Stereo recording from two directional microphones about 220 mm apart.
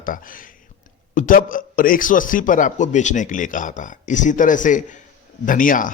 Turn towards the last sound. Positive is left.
turn(degrees=40)  # may be behind; listen again after turning